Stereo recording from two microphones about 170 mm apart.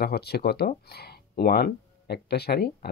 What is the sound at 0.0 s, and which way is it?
Speech, 70° left (ahead or behind).